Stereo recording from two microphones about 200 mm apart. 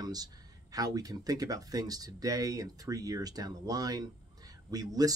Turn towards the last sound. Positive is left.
turn(degrees=-20)  # may be behind; listen again after turning